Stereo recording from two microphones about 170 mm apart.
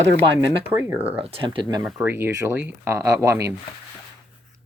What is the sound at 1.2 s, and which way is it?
Speech, 30° right (ahead or behind).